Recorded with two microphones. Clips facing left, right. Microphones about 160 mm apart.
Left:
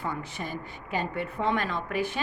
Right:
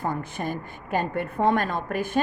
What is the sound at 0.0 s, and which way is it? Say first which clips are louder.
A woman's voice: right 5 dB; 50° right (ahead or behind).